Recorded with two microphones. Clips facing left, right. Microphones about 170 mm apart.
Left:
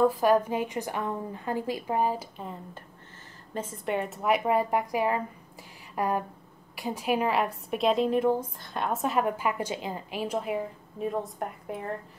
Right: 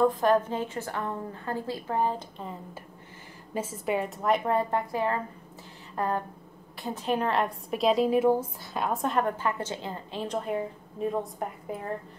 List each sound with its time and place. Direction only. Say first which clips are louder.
0.0 s a woman's voice: left 1 dB; 10° left (ahead or behind)